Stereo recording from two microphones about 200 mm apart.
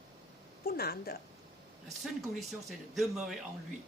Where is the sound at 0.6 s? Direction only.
50° left (ahead or behind).